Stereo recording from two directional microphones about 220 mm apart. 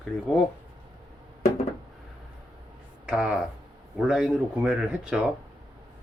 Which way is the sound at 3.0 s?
5° right (ahead or behind).